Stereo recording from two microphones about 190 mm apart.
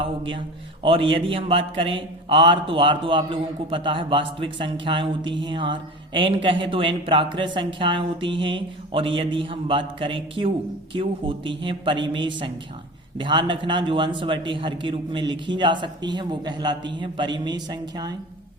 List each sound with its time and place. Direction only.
0.0 s a man's voice: 25° right (ahead or behind)